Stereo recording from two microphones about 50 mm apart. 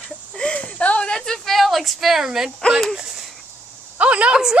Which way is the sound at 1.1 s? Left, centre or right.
Centre.